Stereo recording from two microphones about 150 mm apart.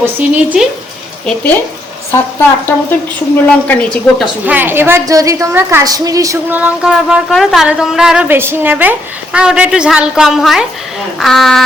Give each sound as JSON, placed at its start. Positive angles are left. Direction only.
{"t": 0.0, "sound": "speech", "side_deg": -10}
{"t": 2.1, "sound": "a woman's voice", "side_deg": 15}
{"t": 4.4, "sound": "a woman's voice", "side_deg": -10}
{"t": 6.6, "sound": "speech", "side_deg": -5}